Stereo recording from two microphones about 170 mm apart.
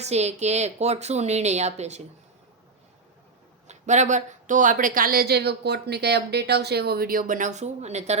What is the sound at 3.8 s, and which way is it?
Speech, 45° right (ahead or behind).